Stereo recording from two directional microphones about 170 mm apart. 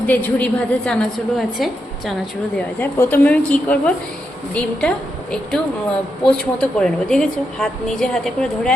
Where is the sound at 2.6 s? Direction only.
10° left (ahead or behind).